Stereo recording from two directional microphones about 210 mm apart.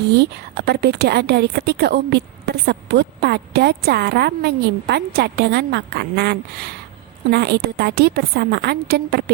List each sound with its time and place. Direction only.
0.1 s a woman's voice: 50° right (ahead or behind)